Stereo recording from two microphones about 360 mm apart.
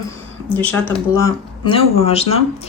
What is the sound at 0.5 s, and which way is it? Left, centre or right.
Speech, centre.